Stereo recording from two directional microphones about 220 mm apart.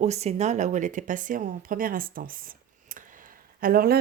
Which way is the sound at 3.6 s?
40° right (ahead or behind).